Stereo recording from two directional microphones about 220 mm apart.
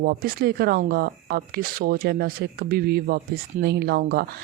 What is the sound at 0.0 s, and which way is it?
Speech, 45° right (ahead or behind).